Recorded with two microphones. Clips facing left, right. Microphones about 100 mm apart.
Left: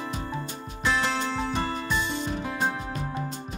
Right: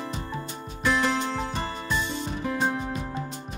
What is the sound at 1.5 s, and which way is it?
Music, centre (ahead or behind).